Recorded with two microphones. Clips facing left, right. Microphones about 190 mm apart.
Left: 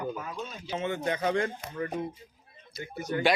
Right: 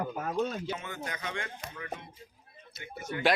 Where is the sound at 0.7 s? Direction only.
25° left (ahead or behind).